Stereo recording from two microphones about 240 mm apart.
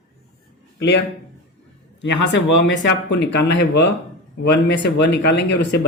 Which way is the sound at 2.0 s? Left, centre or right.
Left.